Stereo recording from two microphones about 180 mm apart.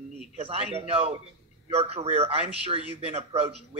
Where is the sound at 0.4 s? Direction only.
35° right (ahead or behind).